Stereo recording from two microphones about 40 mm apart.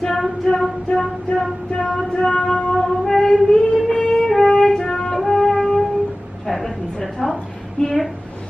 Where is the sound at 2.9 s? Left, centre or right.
Centre.